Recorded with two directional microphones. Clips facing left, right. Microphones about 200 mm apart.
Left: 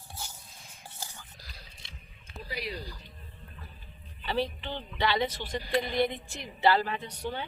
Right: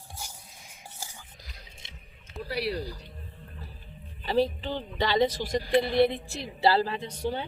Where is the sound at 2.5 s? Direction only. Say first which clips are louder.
Right 7 dB; 70° right (ahead or behind).